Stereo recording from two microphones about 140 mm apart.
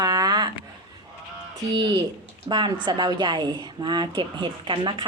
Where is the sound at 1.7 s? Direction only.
30° right (ahead or behind).